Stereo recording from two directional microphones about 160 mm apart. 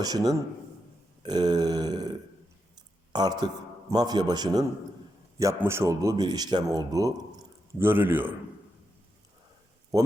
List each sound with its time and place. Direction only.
0.0 s a man's voice: 25° right (ahead or behind)